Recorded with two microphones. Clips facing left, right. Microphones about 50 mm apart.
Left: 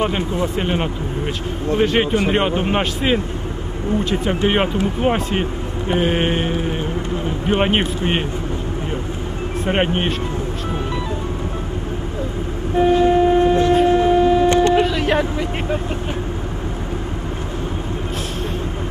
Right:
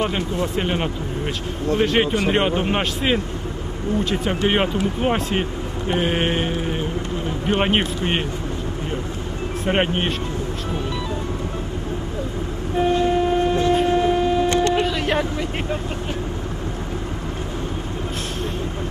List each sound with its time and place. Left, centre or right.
0.0 s a man's voice: centre
9.7 s a man's voice: centre
12.7 s train: centre
14.7 s vehicle: centre